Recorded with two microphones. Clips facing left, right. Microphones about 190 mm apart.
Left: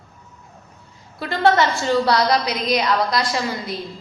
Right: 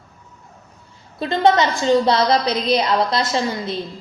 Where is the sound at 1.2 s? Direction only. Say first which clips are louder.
Right 1 dB; 20° right (ahead or behind).